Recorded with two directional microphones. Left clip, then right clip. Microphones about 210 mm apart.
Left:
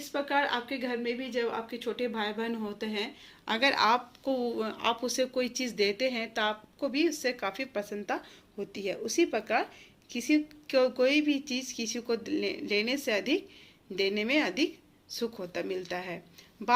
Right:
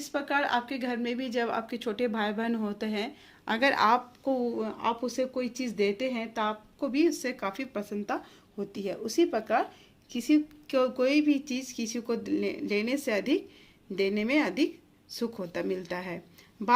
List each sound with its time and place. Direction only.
0.1 s a woman's voice: 55° right (ahead or behind); by 16.2 s 40° right (ahead or behind)